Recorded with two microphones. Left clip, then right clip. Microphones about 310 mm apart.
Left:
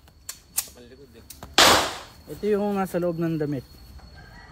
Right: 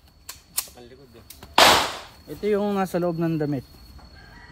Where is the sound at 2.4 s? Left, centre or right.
Centre.